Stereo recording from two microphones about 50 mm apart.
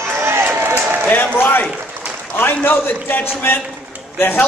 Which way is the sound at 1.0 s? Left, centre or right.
Left.